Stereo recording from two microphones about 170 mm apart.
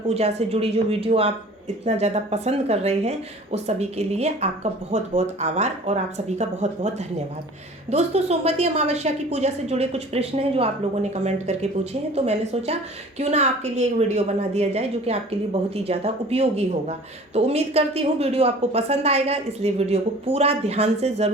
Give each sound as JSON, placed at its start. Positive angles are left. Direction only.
{"t": 0.1, "sound": "speech", "side_deg": -40}